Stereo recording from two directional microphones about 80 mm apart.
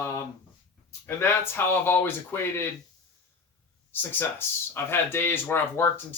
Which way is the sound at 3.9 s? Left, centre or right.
Left.